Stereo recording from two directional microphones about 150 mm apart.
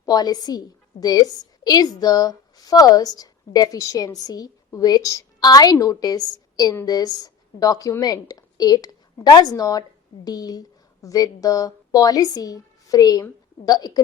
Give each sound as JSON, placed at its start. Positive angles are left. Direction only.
{"t": 0.0, "sound": "a woman's voice", "side_deg": 25}